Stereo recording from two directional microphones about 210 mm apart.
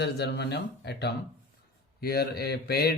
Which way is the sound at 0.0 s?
50° left (ahead or behind).